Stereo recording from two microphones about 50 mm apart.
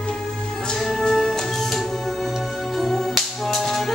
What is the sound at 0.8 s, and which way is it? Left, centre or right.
Music, centre.